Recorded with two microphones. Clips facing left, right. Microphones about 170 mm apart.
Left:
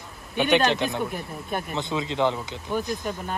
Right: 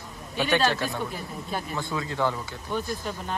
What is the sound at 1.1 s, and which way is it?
Speech, 60° left (ahead or behind).